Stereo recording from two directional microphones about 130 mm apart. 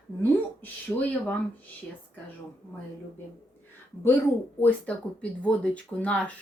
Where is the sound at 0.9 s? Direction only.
5° left (ahead or behind).